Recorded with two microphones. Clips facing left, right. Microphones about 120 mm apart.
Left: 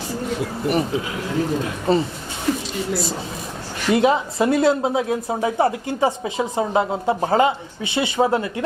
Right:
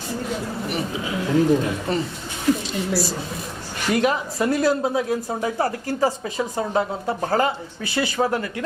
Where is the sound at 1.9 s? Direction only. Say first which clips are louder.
Left 8 dB; 30° left (ahead or behind).